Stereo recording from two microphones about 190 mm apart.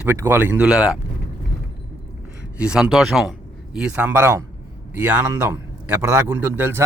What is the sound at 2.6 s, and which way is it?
A man's voice, 5° right (ahead or behind).